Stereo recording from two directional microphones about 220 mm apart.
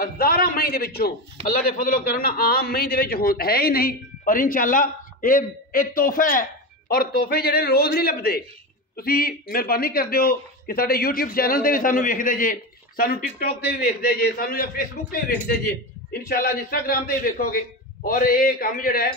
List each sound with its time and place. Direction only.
0.0 s a man's voice: 40° left (ahead or behind)